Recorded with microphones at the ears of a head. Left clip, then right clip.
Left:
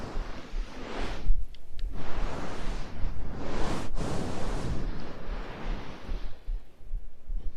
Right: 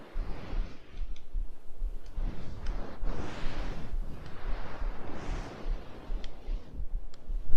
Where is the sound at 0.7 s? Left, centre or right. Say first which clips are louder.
Left 16 dB; left.